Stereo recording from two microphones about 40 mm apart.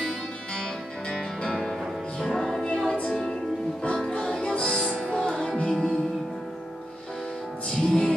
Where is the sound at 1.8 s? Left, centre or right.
Centre.